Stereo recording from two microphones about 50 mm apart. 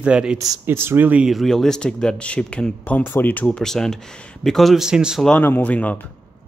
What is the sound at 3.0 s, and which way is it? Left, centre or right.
Speech, left.